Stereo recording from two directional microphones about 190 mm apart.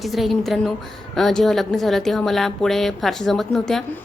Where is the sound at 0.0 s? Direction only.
Centre (ahead or behind).